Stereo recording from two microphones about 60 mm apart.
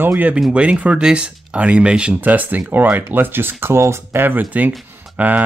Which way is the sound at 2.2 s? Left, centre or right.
Right.